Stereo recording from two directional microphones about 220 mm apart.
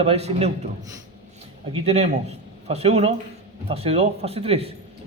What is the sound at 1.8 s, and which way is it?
A man's voice, 30° right (ahead or behind).